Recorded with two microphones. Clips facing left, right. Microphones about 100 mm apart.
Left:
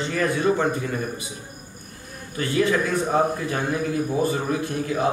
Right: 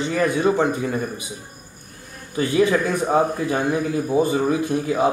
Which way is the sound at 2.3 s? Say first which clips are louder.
Right 4 dB; 20° right (ahead or behind).